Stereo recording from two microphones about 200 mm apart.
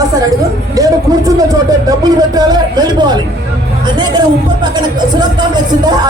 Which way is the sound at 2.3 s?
20° right (ahead or behind).